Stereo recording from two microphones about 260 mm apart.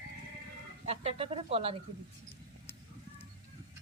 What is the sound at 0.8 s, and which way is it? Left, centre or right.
Speech, right.